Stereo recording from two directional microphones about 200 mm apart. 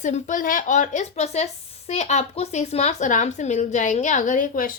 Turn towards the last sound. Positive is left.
turn(degrees=45)  # may be behind; listen again after turning